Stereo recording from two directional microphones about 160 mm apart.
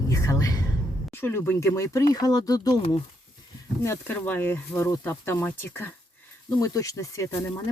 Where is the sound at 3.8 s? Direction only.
15° left (ahead or behind).